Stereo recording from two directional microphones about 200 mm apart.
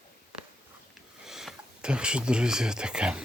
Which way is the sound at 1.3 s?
Centre (ahead or behind).